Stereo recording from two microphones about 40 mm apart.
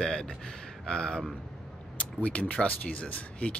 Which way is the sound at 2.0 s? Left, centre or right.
Left.